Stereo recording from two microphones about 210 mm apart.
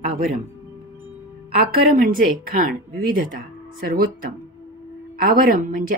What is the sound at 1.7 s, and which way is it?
Speech, 40° right (ahead or behind).